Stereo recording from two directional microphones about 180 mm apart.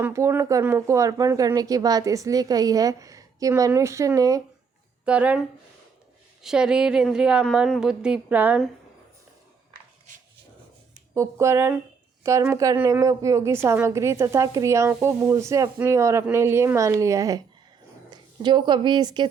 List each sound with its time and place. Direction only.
0.0 s speech: 15° right (ahead or behind)
5.0 s a woman's voice: 5° right (ahead or behind)
11.1 s a woman's voice: 15° right (ahead or behind)